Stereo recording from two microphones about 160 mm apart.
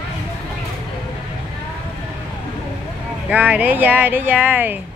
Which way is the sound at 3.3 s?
10° right (ahead or behind).